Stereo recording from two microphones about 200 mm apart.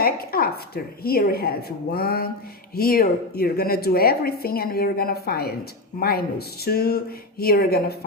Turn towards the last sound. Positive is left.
turn(degrees=50)  # may be behind; listen again after turning